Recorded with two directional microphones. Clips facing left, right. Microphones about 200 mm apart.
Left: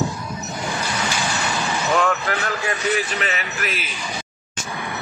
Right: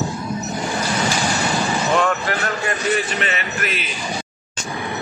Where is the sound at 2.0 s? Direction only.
Centre (ahead or behind).